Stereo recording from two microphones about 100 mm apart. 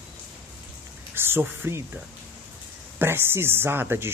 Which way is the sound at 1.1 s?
25° right (ahead or behind).